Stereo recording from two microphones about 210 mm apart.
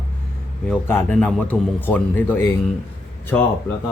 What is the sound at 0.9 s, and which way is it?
Speech, 5° left (ahead or behind).